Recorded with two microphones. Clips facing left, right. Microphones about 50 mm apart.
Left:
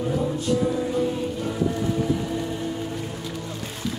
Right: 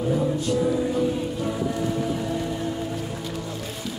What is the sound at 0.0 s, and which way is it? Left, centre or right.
Music, centre.